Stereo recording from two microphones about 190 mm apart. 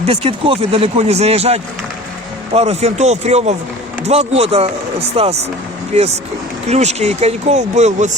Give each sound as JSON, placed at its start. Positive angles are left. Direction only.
{"t": 0.0, "sound": "speech", "side_deg": -30}